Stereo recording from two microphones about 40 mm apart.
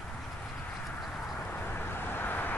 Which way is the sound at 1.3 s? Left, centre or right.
Left.